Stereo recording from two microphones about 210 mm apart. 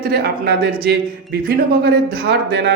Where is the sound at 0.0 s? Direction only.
50° right (ahead or behind).